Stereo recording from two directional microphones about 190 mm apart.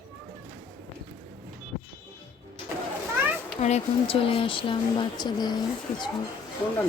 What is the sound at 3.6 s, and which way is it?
Speech, 35° left (ahead or behind).